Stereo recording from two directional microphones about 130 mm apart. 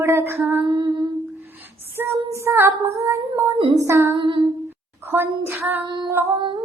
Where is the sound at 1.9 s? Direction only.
20° right (ahead or behind).